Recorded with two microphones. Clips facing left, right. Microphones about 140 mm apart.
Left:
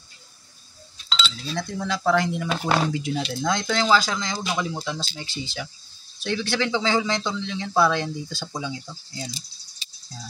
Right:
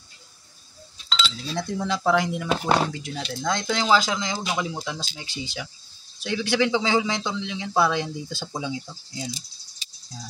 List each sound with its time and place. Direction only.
1.2 s speech: 15° right (ahead or behind)
2.9 s speech: 10° left (ahead or behind)
3.6 s speech: 15° right (ahead or behind)